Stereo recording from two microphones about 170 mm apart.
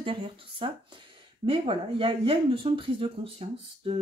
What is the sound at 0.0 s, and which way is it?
Speech, 30° right (ahead or behind).